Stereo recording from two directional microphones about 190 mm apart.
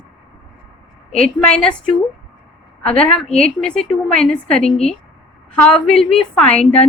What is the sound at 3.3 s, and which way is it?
A woman's voice, 5° left (ahead or behind).